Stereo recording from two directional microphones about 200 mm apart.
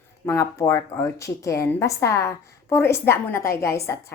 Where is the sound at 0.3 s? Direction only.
15° left (ahead or behind).